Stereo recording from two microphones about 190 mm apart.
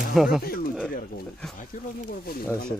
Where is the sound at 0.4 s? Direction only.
50° left (ahead or behind).